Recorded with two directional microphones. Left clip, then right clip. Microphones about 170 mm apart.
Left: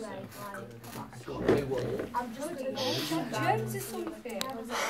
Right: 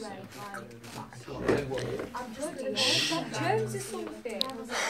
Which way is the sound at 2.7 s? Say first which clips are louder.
Right 7 dB; 10° right (ahead or behind).